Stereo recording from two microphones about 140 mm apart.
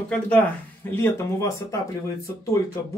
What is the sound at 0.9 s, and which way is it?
Speech, 15° left (ahead or behind).